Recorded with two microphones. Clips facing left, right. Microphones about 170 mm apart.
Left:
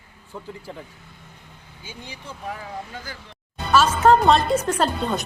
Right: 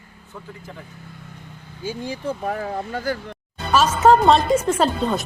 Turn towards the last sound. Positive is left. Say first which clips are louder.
# right 3 dB
turn(degrees=-5)  # may be behind; listen again after turning